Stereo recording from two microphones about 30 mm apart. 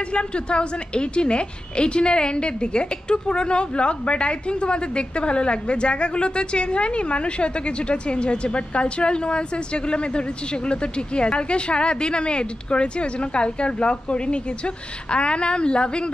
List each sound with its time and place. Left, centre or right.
0.1 s a woman's voice: left